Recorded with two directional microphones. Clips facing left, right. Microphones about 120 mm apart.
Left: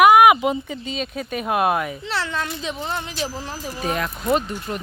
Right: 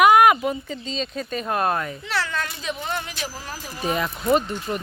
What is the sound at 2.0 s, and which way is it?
A child's voice, 25° left (ahead or behind).